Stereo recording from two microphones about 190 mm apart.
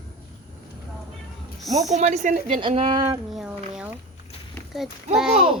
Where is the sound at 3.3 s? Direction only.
5° right (ahead or behind).